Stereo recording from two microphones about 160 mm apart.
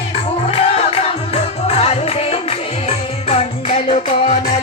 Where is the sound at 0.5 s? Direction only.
40° left (ahead or behind).